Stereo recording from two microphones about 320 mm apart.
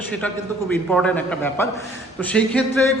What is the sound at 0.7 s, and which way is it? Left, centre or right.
A man's voice, centre.